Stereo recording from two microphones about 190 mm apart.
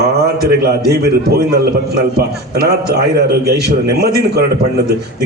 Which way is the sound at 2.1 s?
55° right (ahead or behind).